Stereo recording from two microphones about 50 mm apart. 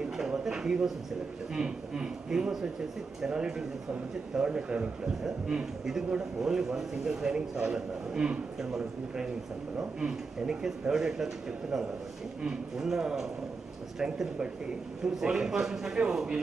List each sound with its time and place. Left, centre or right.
0.2 s a man's voice: centre
12.4 s a man's voice: centre